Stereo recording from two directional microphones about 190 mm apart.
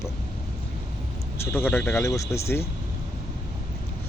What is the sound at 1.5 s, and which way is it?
A man's voice, 10° left (ahead or behind).